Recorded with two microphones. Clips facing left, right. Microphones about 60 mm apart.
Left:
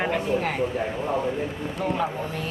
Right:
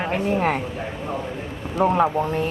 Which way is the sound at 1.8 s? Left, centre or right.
Right.